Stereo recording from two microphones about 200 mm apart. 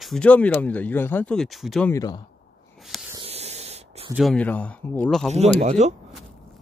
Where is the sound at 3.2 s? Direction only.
30° right (ahead or behind).